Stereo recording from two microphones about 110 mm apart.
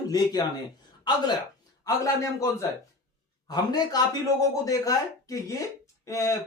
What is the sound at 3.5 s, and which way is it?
Speech, 40° left (ahead or behind).